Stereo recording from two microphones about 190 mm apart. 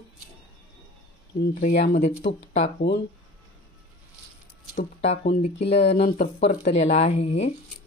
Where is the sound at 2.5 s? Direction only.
35° left (ahead or behind).